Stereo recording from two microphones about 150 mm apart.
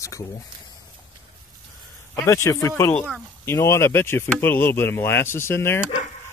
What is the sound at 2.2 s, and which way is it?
Speech, 20° left (ahead or behind).